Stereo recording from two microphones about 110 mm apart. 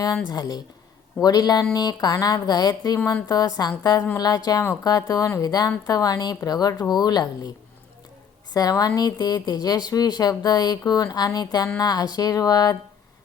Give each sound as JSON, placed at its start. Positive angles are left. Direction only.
{"t": 0.3, "sound": "speech", "side_deg": 35}
{"t": 8.5, "sound": "speech", "side_deg": 35}